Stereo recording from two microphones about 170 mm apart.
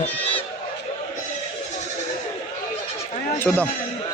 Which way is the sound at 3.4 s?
10° left (ahead or behind).